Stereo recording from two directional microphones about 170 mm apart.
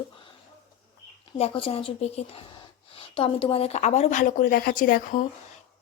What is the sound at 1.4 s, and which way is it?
A woman's voice, 35° left (ahead or behind).